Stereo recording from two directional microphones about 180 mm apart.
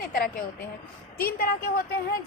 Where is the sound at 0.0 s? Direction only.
50° left (ahead or behind).